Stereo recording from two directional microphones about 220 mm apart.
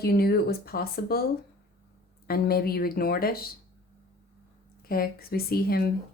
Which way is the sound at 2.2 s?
45° left (ahead or behind).